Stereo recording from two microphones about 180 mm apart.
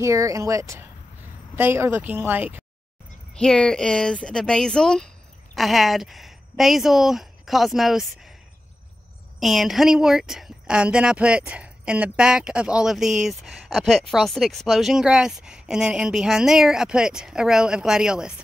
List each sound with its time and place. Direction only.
0.0 s speech: 15° right (ahead or behind)
3.3 s speech: 5° left (ahead or behind)
9.4 s speech: centre (ahead or behind)